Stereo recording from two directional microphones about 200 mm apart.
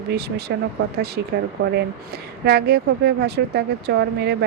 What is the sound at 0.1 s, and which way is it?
Speech, 55° right (ahead or behind).